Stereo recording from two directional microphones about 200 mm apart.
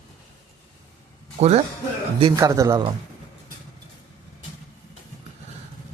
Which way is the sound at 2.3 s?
15° right (ahead or behind).